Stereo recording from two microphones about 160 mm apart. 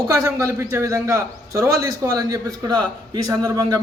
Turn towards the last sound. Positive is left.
turn(degrees=-20)  # may be behind; listen again after turning